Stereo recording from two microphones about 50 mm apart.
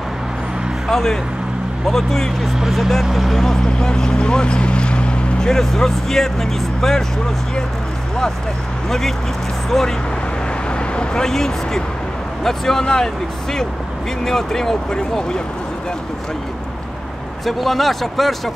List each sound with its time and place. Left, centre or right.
0.8 s speech: centre
5.5 s speech: centre
9.7 s speech: centre
11.0 s speech: centre
17.5 s speech: centre